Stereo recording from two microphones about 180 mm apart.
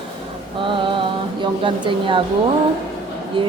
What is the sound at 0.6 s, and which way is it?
Speech, 25° right (ahead or behind).